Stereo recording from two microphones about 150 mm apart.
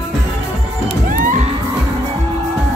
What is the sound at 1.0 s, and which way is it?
Music, 65° right (ahead or behind).